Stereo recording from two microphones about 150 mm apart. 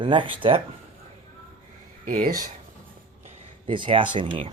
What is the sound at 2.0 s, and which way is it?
Speech, 65° right (ahead or behind).